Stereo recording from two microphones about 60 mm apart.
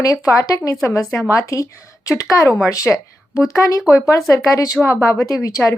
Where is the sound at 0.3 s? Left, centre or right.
Left.